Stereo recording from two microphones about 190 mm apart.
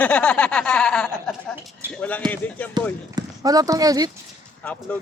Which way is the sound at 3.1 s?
20° right (ahead or behind).